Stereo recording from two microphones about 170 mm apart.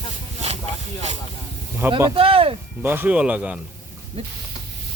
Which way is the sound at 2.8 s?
10° right (ahead or behind).